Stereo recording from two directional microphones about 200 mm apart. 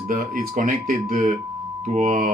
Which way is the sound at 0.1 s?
45° right (ahead or behind).